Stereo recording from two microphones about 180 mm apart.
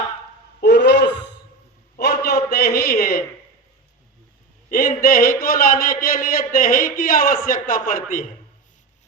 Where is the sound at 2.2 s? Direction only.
60° left (ahead or behind).